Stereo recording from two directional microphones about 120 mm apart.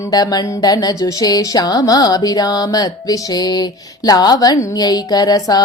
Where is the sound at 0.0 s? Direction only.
30° left (ahead or behind).